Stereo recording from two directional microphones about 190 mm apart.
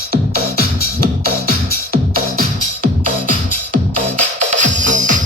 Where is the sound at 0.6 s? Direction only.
50° left (ahead or behind).